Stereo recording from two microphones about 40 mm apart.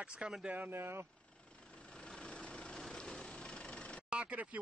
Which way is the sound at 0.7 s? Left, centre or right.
Right.